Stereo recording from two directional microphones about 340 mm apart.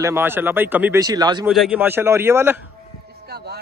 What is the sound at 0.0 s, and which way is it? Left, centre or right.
Speech, centre.